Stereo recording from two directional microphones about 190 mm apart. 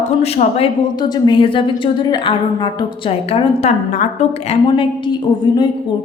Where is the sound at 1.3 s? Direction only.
25° left (ahead or behind).